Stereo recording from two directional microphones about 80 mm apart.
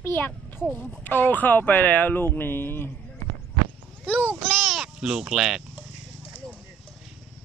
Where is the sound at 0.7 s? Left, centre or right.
Left.